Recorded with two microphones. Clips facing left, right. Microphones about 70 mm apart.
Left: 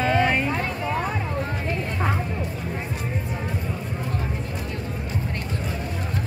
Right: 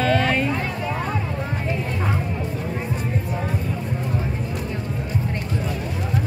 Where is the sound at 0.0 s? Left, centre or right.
Centre.